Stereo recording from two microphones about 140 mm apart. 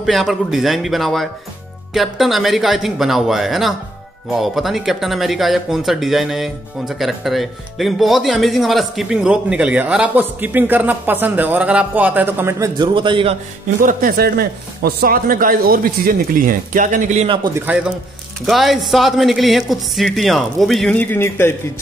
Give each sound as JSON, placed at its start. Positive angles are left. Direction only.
{"t": 0.0, "sound": "speech", "side_deg": 0}
{"t": 13.7, "sound": "a man's voice", "side_deg": -90}
{"t": 17.6, "sound": "a man's voice", "side_deg": -10}